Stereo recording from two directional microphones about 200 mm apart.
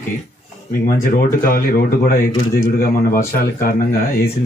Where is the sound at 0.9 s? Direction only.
45° left (ahead or behind).